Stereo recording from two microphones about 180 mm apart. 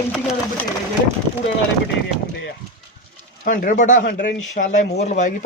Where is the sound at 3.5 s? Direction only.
45° left (ahead or behind).